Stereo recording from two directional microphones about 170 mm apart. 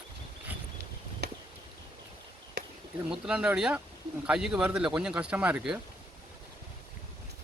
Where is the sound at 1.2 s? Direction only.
75° right (ahead or behind).